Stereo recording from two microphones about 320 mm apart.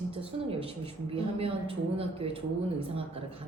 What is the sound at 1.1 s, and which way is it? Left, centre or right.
A woman's voice, centre.